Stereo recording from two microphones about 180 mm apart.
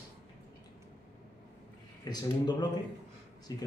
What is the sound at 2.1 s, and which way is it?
A man's voice, 25° left (ahead or behind).